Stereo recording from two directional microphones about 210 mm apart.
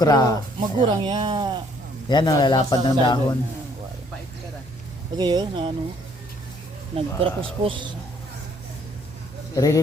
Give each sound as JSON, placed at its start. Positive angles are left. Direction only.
{"t": 0.0, "sound": "speech", "side_deg": 20}
{"t": 0.8, "sound": "speech", "side_deg": -20}
{"t": 2.0, "sound": "a man's voice", "side_deg": 20}
{"t": 5.1, "sound": "speech", "side_deg": -20}
{"t": 7.2, "sound": "speech", "side_deg": -25}
{"t": 9.6, "sound": "speech", "side_deg": 15}